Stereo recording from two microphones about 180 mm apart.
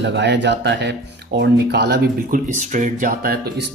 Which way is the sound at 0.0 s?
75° right (ahead or behind).